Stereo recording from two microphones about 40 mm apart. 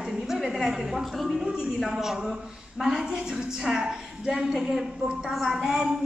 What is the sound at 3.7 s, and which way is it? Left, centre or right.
Speech, centre.